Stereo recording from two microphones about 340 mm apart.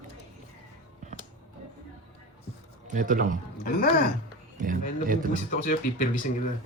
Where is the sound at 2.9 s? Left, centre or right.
Right.